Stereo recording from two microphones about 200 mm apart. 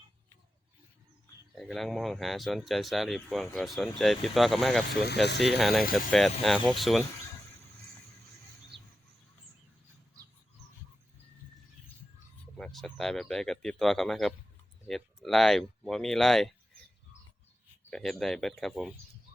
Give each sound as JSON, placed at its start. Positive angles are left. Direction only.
{"t": 1.5, "sound": "speech", "side_deg": 0}
{"t": 5.0, "sound": "speech", "side_deg": 55}
{"t": 5.5, "sound": "speech", "side_deg": 0}
{"t": 5.8, "sound": "speech", "side_deg": 45}
{"t": 6.1, "sound": "speech", "side_deg": 0}
{"t": 8.7, "sound": "a sound", "side_deg": -25}
{"t": 12.5, "sound": "speech", "side_deg": 0}
{"t": 17.9, "sound": "speech", "side_deg": 0}